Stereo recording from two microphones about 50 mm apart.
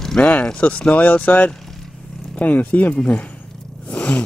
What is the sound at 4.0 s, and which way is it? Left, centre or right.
Zipper, left.